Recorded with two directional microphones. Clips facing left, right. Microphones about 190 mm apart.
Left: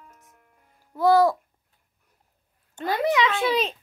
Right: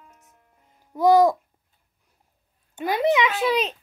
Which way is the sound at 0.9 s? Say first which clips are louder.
Right 2 dB; 15° right (ahead or behind).